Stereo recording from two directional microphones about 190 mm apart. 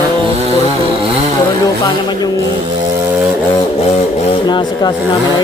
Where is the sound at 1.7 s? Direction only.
20° left (ahead or behind).